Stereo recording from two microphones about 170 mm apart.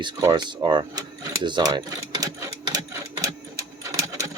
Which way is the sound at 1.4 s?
25° right (ahead or behind).